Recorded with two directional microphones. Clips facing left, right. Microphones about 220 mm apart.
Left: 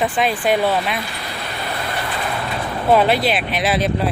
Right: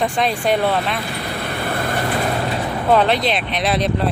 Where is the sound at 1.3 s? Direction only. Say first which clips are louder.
Right 4 dB; 50° right (ahead or behind).